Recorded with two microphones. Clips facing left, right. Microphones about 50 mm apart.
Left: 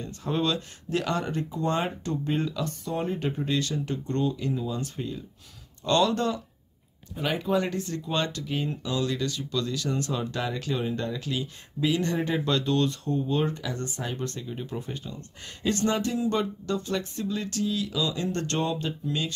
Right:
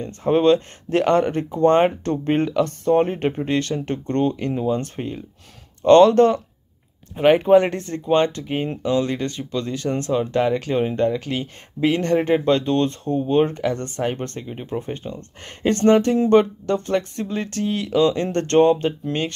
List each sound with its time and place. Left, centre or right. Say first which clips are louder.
0.0 s speech: right 11 dB; right